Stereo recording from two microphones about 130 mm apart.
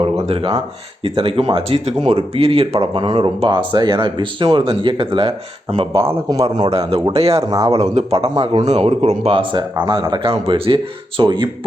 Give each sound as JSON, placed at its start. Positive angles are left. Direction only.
{"t": 0.0, "sound": "a sound", "side_deg": -45}
{"t": 1.0, "sound": "speech", "side_deg": -45}
{"t": 6.2, "sound": "speech", "side_deg": -30}
{"t": 6.7, "sound": "speech", "side_deg": -50}
{"t": 7.4, "sound": "speech", "side_deg": -30}
{"t": 7.8, "sound": "speech", "side_deg": -50}